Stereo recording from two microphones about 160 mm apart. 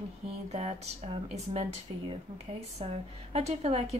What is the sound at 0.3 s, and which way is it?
Speech, 40° right (ahead or behind).